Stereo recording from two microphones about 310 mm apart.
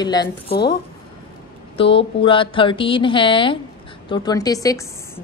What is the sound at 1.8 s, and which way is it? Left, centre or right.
A woman's voice, centre.